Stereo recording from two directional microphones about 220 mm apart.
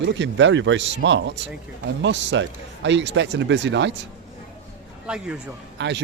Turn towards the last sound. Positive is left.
turn(degrees=-50)  # may be behind; listen again after turning